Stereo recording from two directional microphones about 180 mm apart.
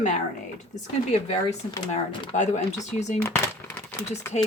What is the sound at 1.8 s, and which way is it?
Speech, 40° left (ahead or behind).